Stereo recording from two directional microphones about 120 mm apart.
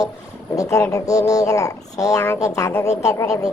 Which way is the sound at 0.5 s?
30° left (ahead or behind).